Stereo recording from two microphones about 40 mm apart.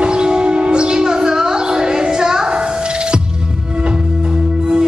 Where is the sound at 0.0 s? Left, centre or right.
Right.